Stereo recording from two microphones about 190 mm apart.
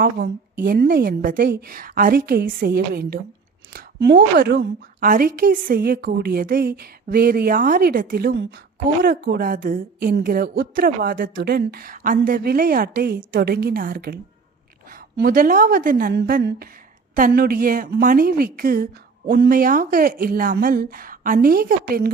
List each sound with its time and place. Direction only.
0.6 s a woman's voice: 50° right (ahead or behind)
3.7 s a sound: 50° right (ahead or behind)
4.4 s a woman's voice: 55° right (ahead or behind)